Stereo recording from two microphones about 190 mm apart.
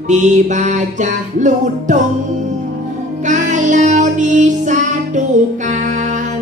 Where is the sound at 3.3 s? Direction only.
40° right (ahead or behind).